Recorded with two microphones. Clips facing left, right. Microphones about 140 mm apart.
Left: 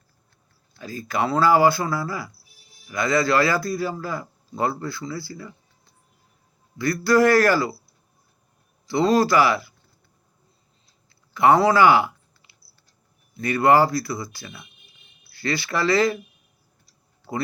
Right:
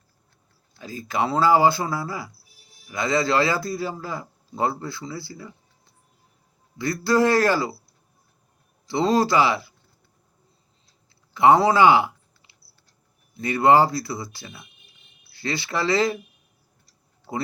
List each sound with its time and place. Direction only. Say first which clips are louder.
0.8 s a man's voice: even; 20° right (ahead or behind)
6.7 s a man's voice: left 2 dB; 25° right (ahead or behind)
8.9 s a man's voice: left 2 dB; 25° right (ahead or behind)
11.3 s a man's voice: even; 20° right (ahead or behind)
17.3 s speech: left 1 dB; 15° right (ahead or behind)